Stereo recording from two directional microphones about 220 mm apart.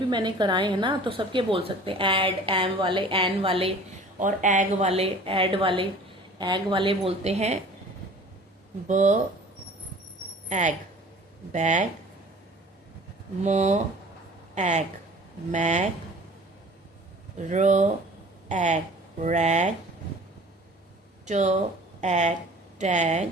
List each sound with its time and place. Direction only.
0.1 s a woman's voice: 20° right (ahead or behind)
4.2 s a woman's voice: 35° right (ahead or behind)
8.9 s speech: 35° right (ahead or behind)
10.5 s speech: 35° right (ahead or behind)
13.4 s speech: 30° right (ahead or behind)
17.3 s speech: 35° right (ahead or behind)
21.2 s speech: 30° right (ahead or behind)